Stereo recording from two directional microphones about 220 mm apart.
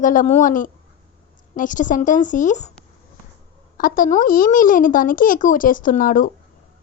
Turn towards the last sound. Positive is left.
turn(degrees=40)  # may be behind; listen again after turning